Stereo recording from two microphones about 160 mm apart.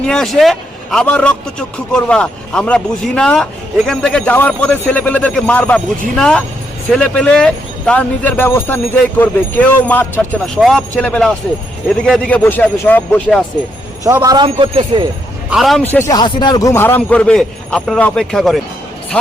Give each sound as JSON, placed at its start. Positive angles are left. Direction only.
{"t": 0.0, "sound": "a man's voice", "side_deg": 5}
{"t": 14.0, "sound": "a man's voice", "side_deg": -20}
{"t": 14.4, "sound": "speech", "side_deg": -35}
{"t": 15.4, "sound": "a man's voice", "side_deg": 0}
{"t": 15.9, "sound": "speech", "side_deg": 15}
{"t": 16.1, "sound": "speech", "side_deg": 30}